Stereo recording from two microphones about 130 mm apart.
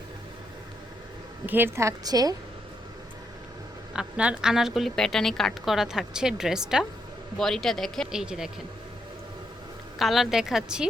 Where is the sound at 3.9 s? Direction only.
10° right (ahead or behind).